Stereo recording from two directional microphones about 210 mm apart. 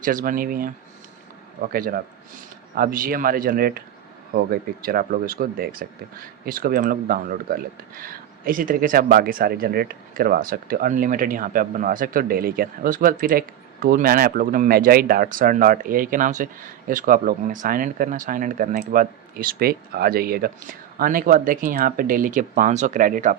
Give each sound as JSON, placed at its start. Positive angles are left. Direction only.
{"t": 0.0, "sound": "speech", "side_deg": -40}